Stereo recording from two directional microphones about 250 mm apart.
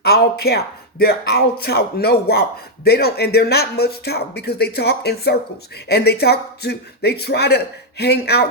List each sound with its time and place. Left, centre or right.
0.0 s speech: left